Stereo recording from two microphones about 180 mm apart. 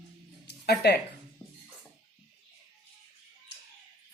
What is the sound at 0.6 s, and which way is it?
Speech, 65° left (ahead or behind).